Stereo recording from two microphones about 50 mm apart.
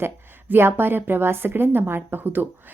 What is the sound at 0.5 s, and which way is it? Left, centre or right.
Speech, right.